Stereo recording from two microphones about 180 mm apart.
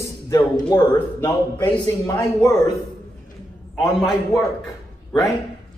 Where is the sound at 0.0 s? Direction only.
20° left (ahead or behind).